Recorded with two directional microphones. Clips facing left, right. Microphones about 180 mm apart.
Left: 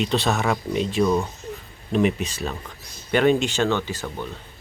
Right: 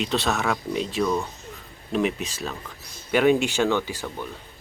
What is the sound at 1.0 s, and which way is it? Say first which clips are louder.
Speech: left 4 dB; 15° left (ahead or behind).